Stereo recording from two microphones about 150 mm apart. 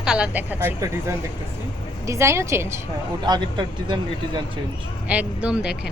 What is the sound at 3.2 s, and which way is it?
Speech, 30° right (ahead or behind).